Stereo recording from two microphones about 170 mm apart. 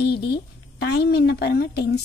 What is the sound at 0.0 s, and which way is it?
A woman's voice, 70° left (ahead or behind).